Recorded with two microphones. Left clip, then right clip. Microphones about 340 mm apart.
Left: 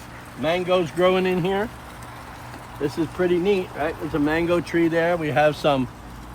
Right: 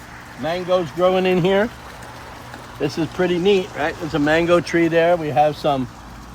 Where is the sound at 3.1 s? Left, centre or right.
Right.